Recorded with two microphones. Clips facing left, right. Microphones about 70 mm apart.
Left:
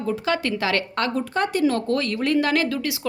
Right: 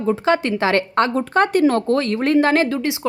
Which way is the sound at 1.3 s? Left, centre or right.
Right.